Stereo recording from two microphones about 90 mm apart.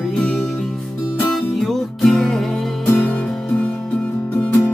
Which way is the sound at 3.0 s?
15° left (ahead or behind).